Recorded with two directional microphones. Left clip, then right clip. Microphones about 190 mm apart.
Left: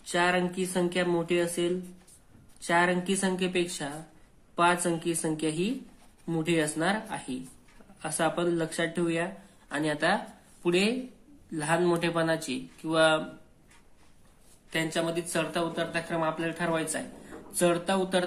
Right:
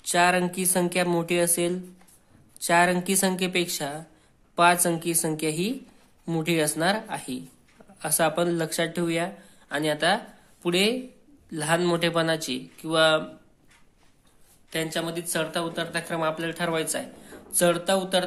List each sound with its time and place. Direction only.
0.0 s speech: 35° right (ahead or behind); by 13.2 s 20° right (ahead or behind)
14.7 s speech: 15° right (ahead or behind)